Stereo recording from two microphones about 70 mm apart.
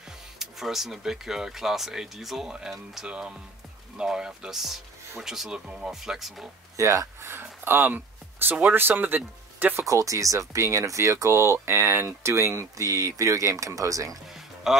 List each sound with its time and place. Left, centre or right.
0.4 s speech: centre
6.8 s speech: right
9.8 s speech: right
14.3 s music: centre